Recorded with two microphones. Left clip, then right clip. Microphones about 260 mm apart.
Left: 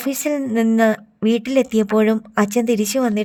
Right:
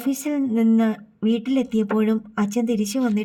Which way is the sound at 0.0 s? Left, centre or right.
Left.